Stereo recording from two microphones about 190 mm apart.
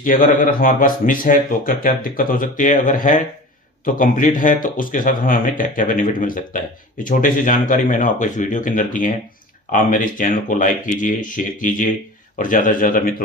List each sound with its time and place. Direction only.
0.0 s speech: 45° left (ahead or behind)